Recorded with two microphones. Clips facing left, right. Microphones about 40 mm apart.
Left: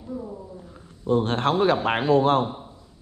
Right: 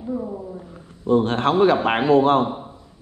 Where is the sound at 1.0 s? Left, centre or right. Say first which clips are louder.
Right 4 dB; right.